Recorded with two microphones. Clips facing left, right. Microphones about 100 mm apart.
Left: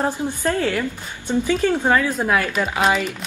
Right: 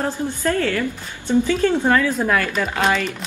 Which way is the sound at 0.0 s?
20° left (ahead or behind).